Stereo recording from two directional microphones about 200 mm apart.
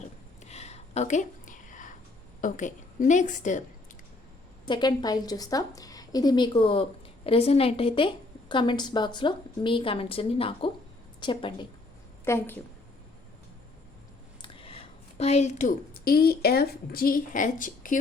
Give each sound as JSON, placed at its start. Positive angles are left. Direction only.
{"t": 0.4, "sound": "a sound", "side_deg": 35}
{"t": 2.4, "sound": "a woman's voice", "side_deg": 40}
{"t": 4.6, "sound": "a woman's voice", "side_deg": 20}
{"t": 12.2, "sound": "a woman's voice", "side_deg": 10}
{"t": 14.4, "sound": "a woman's voice", "side_deg": 30}